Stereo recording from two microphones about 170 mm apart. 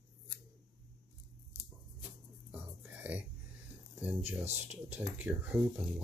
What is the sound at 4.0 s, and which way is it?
Speech, 10° right (ahead or behind).